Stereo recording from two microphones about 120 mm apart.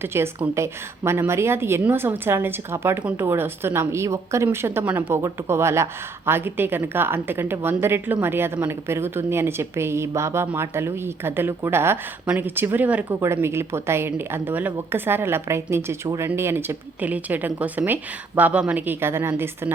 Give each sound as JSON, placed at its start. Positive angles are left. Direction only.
{"t": 0.0, "sound": "a woman's voice", "side_deg": -20}